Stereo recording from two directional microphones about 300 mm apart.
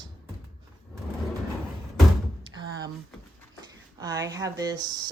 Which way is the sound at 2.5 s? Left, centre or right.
Centre.